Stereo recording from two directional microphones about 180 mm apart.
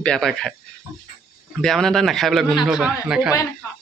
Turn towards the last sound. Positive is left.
turn(degrees=-5)  # may be behind; listen again after turning